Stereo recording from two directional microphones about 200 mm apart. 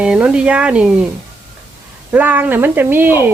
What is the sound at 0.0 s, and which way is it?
Speech, 5° right (ahead or behind).